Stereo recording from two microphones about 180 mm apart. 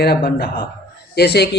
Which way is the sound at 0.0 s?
60° left (ahead or behind).